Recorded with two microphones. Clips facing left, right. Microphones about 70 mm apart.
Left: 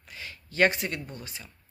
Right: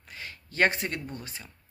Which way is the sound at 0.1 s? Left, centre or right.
Right.